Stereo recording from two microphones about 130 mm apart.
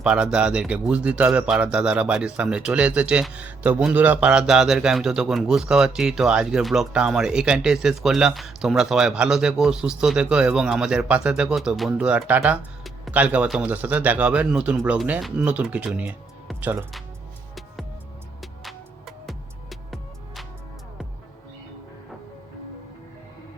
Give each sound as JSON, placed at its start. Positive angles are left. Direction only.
{"t": 0.0, "sound": "speech", "side_deg": -5}
{"t": 18.6, "sound": "music", "side_deg": 0}